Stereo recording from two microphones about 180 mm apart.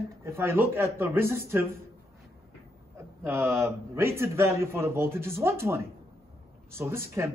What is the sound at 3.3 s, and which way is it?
A man's voice, 15° right (ahead or behind).